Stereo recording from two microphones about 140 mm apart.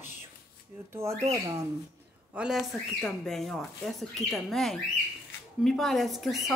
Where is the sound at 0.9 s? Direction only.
20° right (ahead or behind).